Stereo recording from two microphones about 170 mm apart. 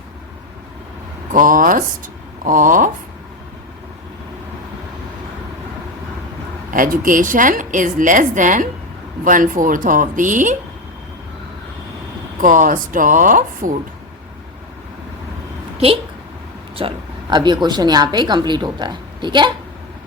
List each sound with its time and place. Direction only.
1.3 s a woman's voice: 50° right (ahead or behind)
6.7 s a woman's voice: 55° right (ahead or behind)
12.4 s a woman's voice: 50° right (ahead or behind)
16.7 s a woman's voice: 30° right (ahead or behind)